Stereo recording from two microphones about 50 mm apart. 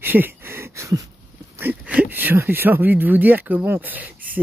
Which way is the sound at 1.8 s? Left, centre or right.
Right.